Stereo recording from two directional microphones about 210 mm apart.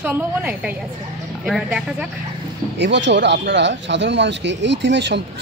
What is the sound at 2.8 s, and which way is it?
Speech, 55° right (ahead or behind).